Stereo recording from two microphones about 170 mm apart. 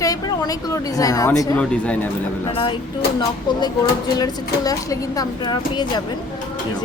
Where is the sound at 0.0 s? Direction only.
20° left (ahead or behind).